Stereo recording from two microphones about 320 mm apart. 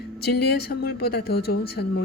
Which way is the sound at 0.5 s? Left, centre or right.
Left.